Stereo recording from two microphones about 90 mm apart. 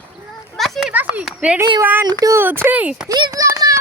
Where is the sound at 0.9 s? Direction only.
15° right (ahead or behind).